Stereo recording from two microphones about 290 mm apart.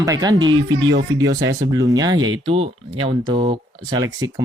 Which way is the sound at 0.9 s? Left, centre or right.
Right.